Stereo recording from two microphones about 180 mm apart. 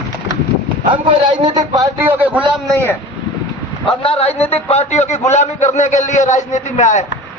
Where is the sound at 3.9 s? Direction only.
30° left (ahead or behind).